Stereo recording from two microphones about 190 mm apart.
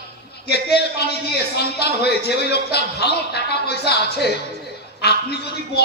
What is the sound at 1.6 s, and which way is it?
A man's voice, 60° left (ahead or behind).